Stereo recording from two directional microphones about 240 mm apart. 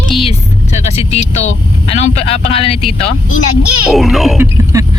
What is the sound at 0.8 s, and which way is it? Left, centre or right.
Speech, left.